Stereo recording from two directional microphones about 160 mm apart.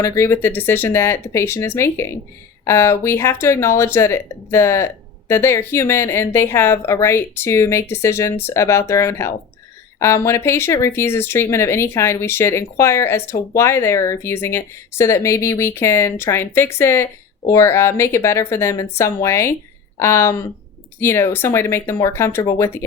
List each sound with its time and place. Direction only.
0.0 s speech: 20° left (ahead or behind)